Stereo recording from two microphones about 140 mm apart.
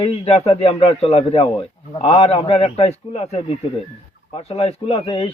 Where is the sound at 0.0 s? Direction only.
45° left (ahead or behind).